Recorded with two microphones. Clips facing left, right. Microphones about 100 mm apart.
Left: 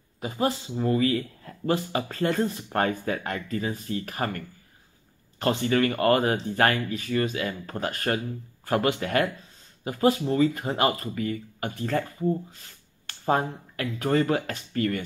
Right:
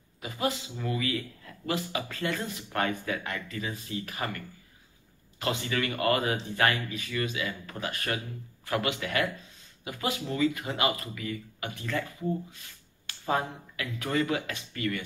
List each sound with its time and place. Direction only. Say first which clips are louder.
0.2 s speech: left 4 dB; 35° left (ahead or behind)